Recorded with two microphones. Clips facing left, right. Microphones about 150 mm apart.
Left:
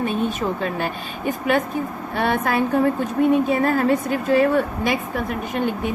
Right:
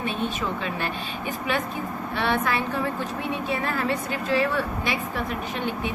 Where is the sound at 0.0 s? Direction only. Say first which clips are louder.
Left 5 dB; 45° left (ahead or behind).